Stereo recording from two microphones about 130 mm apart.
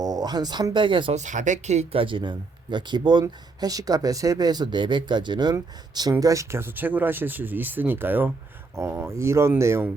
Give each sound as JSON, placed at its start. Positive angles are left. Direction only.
{"t": 0.0, "sound": "speech", "side_deg": -30}
{"t": 1.1, "sound": "speech", "side_deg": -70}